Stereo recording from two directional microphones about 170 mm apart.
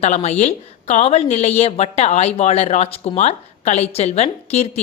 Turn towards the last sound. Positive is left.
turn(degrees=40)  # may be behind; listen again after turning